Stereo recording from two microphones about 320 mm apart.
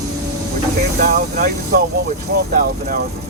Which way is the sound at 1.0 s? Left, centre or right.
Right.